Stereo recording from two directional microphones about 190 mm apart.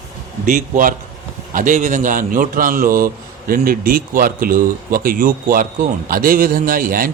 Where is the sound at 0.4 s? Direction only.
45° right (ahead or behind).